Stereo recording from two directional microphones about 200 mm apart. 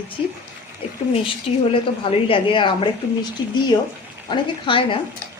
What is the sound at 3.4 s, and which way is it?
Speech, 70° left (ahead or behind).